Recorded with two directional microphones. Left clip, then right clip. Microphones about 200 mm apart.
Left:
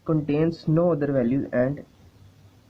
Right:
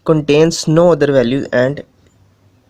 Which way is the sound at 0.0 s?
45° right (ahead or behind).